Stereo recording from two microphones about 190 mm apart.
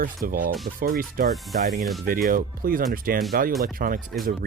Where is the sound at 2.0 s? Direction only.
50° right (ahead or behind).